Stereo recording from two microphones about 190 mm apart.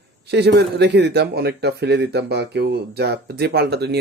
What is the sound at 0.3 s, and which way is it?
Speech, 60° right (ahead or behind).